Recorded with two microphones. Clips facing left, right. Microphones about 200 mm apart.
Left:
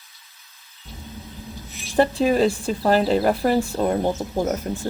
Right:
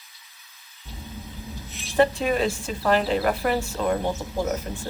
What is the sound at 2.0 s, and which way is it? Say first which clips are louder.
Speech: left 3 dB; 35° left (ahead or behind).